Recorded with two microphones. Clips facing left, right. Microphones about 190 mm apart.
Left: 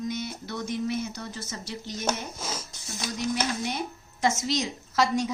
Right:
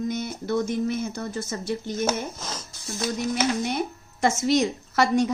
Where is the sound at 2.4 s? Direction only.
10° left (ahead or behind).